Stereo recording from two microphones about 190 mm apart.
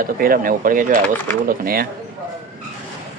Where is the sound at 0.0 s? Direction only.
50° right (ahead or behind).